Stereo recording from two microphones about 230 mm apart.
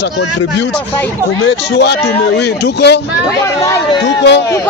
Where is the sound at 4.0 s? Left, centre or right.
Left.